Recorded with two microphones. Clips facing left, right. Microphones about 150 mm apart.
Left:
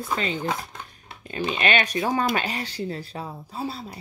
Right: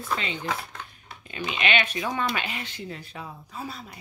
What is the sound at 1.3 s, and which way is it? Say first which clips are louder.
Speech: left 3 dB; 35° left (ahead or behind).